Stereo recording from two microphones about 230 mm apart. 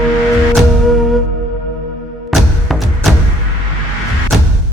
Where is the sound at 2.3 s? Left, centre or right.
Centre.